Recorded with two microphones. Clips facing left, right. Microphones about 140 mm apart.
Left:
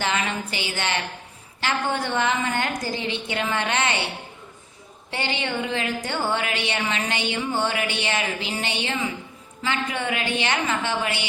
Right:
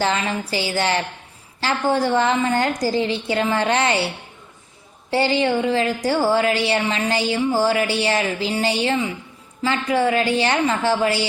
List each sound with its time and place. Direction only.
0.0 s a woman's voice: 30° right (ahead or behind)
5.1 s a woman's voice: 35° right (ahead or behind)